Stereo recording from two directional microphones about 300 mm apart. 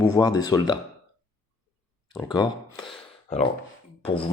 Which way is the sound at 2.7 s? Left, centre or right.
Centre.